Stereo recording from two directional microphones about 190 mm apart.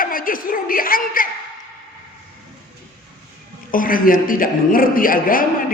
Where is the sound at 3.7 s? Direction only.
45° left (ahead or behind).